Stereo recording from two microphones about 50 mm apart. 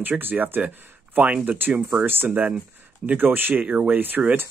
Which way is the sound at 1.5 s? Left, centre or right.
Right.